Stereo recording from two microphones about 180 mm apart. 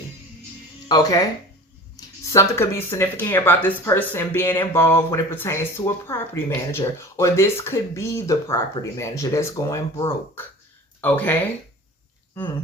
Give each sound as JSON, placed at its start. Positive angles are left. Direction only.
{"t": 0.9, "sound": "speech", "side_deg": 20}